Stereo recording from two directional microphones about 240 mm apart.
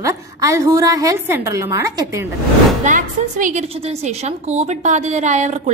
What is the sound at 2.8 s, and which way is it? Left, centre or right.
A woman's voice, right.